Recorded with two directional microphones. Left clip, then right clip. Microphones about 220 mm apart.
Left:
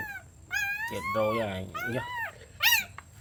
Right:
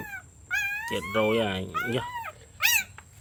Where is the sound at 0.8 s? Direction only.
40° right (ahead or behind).